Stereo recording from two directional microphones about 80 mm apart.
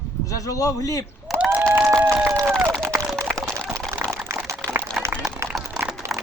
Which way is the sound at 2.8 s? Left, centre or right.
Right.